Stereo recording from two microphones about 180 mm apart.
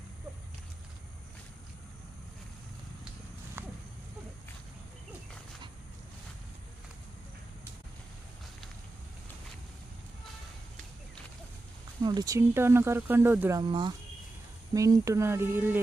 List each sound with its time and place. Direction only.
3.6 s a sound: 15° right (ahead or behind)
12.0 s speech: 20° right (ahead or behind)
13.6 s speech: 25° right (ahead or behind)